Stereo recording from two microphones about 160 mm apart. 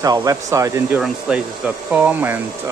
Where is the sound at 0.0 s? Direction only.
20° right (ahead or behind).